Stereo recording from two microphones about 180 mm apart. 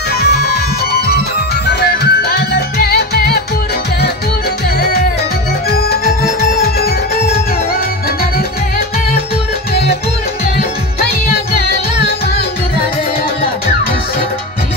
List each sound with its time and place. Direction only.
0.2 s music: 65° left (ahead or behind)
1.7 s music: 60° left (ahead or behind)
4.7 s music: 60° left (ahead or behind)